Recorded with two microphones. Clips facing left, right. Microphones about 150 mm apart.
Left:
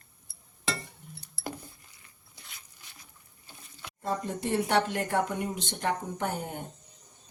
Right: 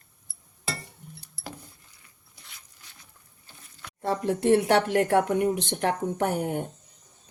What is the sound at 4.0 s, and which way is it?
Speech, 70° right (ahead or behind).